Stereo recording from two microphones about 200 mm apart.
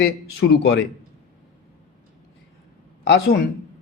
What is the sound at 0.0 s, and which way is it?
Speech, 55° left (ahead or behind).